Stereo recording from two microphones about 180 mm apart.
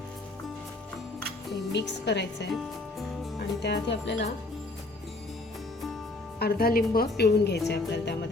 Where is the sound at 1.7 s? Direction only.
75° left (ahead or behind).